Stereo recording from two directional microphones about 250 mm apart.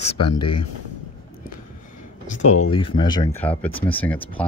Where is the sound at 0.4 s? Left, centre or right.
Centre.